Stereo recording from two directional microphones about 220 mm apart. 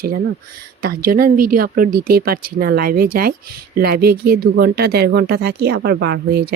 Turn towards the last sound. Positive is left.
turn(degrees=-50)  # may be behind; listen again after turning